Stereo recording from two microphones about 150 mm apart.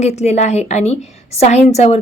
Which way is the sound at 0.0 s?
45° left (ahead or behind).